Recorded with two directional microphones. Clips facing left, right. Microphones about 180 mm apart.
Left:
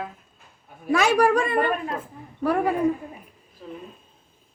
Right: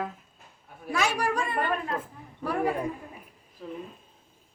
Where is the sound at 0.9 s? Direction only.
70° left (ahead or behind).